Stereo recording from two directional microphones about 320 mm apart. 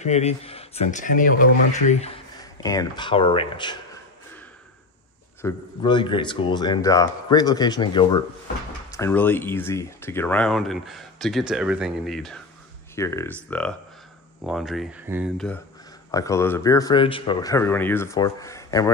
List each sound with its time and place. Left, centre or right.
0.0 s speech: centre
2.6 s speech: centre
5.4 s speech: centre